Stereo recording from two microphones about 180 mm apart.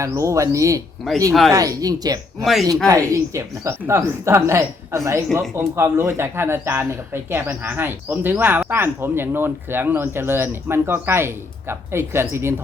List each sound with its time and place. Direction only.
0.0 s speech: 15° right (ahead or behind)
1.3 s speech: centre (ahead or behind)
1.5 s speech: 20° right (ahead or behind)
2.4 s speech: centre (ahead or behind)
2.8 s speech: 20° right (ahead or behind)